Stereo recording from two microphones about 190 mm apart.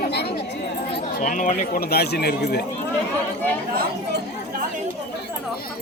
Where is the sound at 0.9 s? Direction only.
40° left (ahead or behind); by 2.6 s 60° left (ahead or behind).